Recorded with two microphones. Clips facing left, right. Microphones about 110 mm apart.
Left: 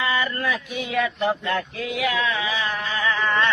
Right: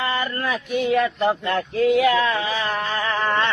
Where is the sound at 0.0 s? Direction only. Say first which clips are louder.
Even; 35° right (ahead or behind).